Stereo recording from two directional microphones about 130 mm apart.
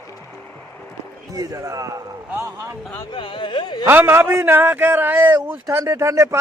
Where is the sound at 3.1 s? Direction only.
40° left (ahead or behind).